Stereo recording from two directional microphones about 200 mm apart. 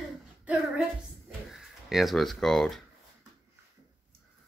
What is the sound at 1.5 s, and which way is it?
Speech, centre (ahead or behind).